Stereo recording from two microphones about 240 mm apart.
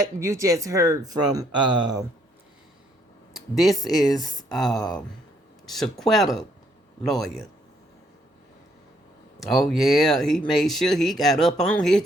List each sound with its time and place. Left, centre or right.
0.0 s speech: centre
3.3 s speech: centre
4.0 s speech: centre
4.4 s speech: centre
9.4 s speech: centre